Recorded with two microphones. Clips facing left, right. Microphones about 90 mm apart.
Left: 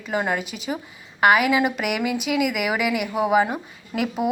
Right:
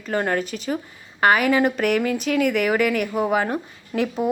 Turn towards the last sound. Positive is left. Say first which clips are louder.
# right 1 dB
turn(degrees=5)  # may be behind; listen again after turning